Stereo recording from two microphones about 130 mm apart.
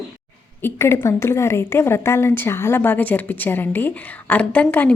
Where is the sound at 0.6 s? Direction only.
20° left (ahead or behind).